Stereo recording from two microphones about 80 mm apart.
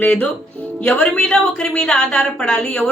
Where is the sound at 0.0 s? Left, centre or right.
Centre.